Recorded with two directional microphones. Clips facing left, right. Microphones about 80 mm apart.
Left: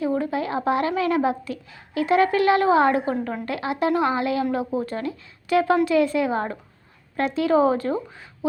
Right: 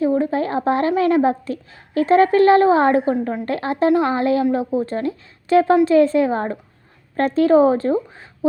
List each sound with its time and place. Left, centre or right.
0.0 s speech: right